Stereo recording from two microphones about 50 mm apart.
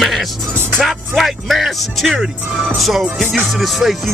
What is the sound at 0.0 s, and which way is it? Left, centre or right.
Music, centre.